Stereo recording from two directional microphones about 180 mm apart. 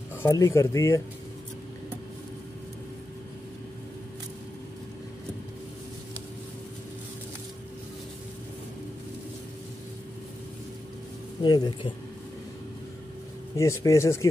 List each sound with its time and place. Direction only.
0.3 s speech: 15° left (ahead or behind)
11.4 s speech: 25° left (ahead or behind)
13.6 s speech: 15° left (ahead or behind)